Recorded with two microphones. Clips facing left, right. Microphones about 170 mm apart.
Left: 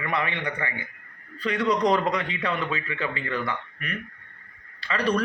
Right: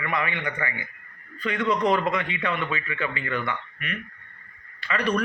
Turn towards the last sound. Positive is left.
turn(degrees=30)  # may be behind; listen again after turning